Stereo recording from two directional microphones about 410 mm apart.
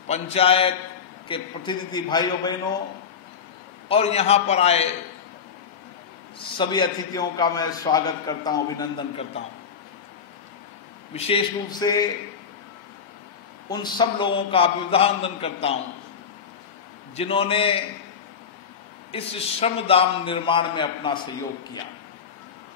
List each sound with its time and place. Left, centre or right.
0.1 s a man's voice: centre
3.9 s a man's voice: centre
6.6 s a man's voice: centre
11.1 s a man's voice: centre
13.7 s a man's voice: centre
17.1 s a man's voice: centre
19.1 s a man's voice: centre